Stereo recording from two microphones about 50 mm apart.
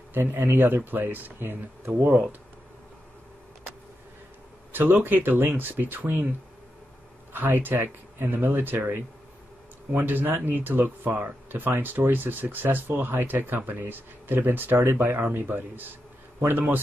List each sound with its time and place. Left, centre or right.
0.1 s speech: right
4.7 s speech: right
7.3 s a man's voice: right